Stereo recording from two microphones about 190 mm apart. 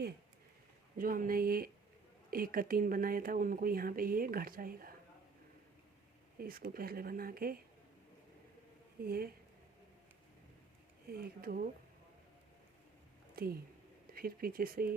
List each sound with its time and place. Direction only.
0.9 s speech: 45° right (ahead or behind)
6.4 s speech: 50° right (ahead or behind)
9.0 s speech: 50° right (ahead or behind)
11.1 s speech: 50° right (ahead or behind)
13.3 s speech: 55° right (ahead or behind)